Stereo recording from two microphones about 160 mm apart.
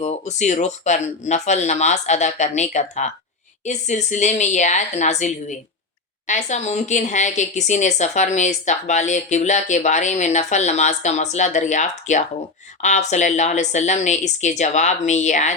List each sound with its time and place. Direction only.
0.0 s a woman's voice: 45° left (ahead or behind)